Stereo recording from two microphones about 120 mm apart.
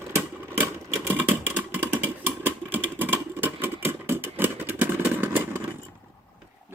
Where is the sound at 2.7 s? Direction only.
15° right (ahead or behind).